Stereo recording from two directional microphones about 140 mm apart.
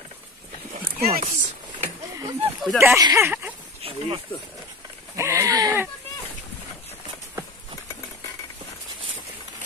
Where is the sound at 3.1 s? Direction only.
15° right (ahead or behind).